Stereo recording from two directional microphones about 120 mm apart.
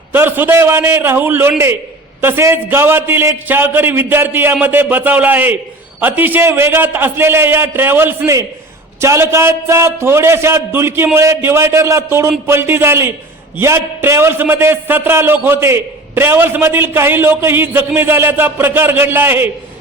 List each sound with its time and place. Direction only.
0.1 s a man's voice: 15° right (ahead or behind)